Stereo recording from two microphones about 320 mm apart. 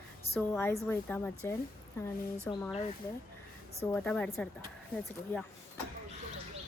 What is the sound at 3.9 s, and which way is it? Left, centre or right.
Speech, centre.